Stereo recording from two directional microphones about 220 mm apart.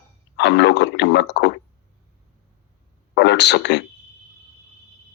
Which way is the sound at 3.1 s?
50° left (ahead or behind).